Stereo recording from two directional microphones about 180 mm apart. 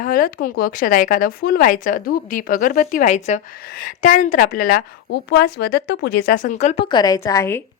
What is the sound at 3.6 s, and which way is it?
A woman's voice, 50° left (ahead or behind).